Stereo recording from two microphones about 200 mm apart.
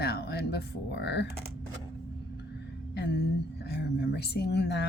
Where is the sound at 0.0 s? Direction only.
55° left (ahead or behind).